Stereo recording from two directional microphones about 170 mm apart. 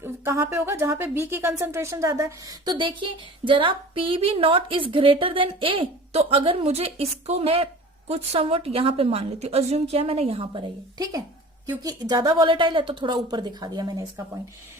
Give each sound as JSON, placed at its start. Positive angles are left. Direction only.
{"t": 0.0, "sound": "a woman's voice", "side_deg": -15}